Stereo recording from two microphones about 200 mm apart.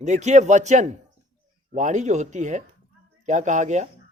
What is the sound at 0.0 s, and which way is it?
Speech, 35° right (ahead or behind).